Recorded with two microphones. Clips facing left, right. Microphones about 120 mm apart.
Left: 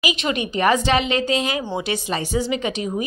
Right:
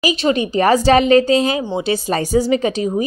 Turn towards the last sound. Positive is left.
turn(degrees=-35)  # may be behind; listen again after turning